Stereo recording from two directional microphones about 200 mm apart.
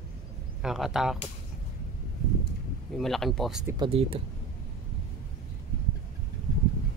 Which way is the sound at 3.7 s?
30° right (ahead or behind).